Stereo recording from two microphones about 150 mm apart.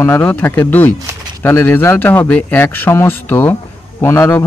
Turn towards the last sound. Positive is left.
turn(degrees=15)  # may be behind; listen again after turning